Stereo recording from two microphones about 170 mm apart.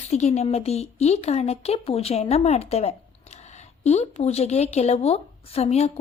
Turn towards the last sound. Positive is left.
turn(degrees=40)  # may be behind; listen again after turning